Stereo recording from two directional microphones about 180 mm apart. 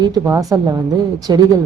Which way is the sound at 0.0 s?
20° right (ahead or behind).